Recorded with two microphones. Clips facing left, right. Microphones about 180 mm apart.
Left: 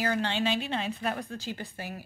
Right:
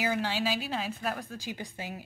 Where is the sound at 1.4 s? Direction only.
15° right (ahead or behind).